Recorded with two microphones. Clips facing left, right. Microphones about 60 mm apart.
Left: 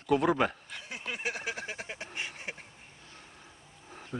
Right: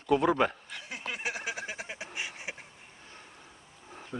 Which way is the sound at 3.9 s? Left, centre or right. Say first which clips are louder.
Even; centre.